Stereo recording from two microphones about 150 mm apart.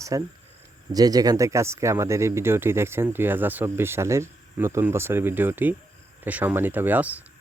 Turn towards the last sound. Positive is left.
turn(degrees=-10)  # may be behind; listen again after turning